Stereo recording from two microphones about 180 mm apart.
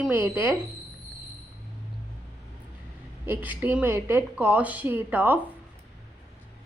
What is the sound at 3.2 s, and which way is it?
Speech, 10° right (ahead or behind).